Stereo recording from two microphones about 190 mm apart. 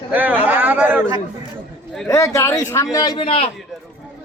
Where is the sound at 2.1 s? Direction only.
15° left (ahead or behind).